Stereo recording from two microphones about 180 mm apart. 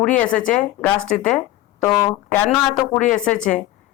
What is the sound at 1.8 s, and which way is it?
Speech, 30° left (ahead or behind).